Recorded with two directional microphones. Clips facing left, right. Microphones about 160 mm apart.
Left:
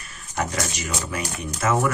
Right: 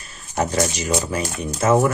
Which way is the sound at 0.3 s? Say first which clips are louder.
Right 6 dB; 30° right (ahead or behind).